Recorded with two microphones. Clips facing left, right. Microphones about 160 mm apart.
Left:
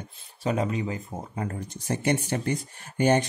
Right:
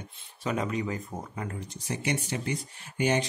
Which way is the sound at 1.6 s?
50° left (ahead or behind).